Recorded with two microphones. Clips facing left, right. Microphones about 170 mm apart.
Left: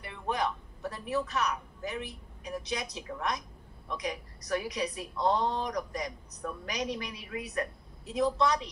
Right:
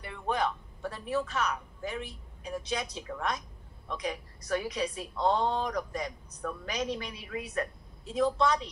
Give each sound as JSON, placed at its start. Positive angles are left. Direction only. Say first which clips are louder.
{"t": 0.0, "sound": "a man's voice", "louder": "right 1 dB", "side_deg": -30}